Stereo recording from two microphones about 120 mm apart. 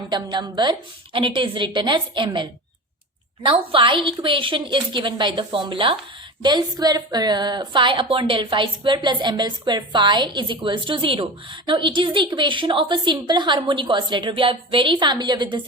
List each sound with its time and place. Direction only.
0.1 s a woman's voice: 35° right (ahead or behind)